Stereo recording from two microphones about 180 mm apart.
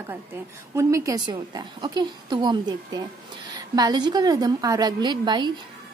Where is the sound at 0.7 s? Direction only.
15° right (ahead or behind).